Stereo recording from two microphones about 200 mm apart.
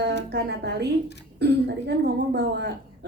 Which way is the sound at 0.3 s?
55° right (ahead or behind).